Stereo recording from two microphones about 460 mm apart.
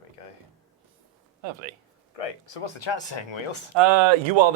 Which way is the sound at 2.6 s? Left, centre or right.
Left.